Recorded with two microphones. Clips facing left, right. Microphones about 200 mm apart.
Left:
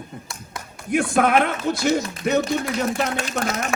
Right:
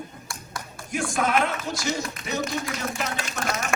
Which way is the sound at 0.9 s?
60° left (ahead or behind).